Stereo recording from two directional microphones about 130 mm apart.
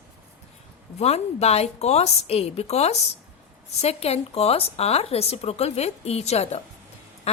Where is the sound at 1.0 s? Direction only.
55° left (ahead or behind).